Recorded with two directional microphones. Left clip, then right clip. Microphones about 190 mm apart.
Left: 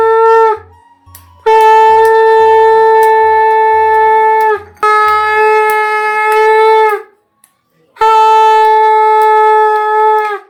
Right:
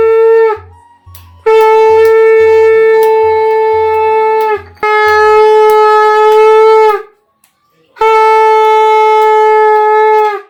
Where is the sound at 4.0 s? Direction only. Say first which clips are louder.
Left 2 dB; 30° right (ahead or behind).